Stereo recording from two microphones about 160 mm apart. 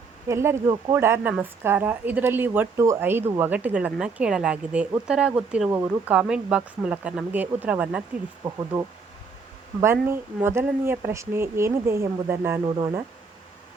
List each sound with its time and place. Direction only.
0.3 s speech: 15° right (ahead or behind)
12.6 s speech: 25° right (ahead or behind)